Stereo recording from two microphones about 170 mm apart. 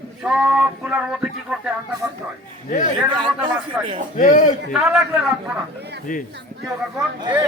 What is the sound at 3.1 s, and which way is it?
Speech, 25° right (ahead or behind).